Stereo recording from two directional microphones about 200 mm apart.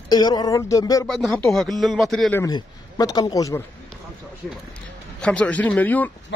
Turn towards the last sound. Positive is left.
turn(degrees=10)  # may be behind; listen again after turning